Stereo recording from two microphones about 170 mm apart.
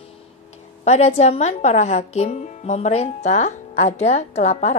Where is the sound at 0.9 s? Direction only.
40° left (ahead or behind).